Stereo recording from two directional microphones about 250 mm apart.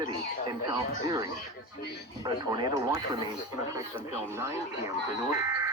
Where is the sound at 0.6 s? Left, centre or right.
Centre.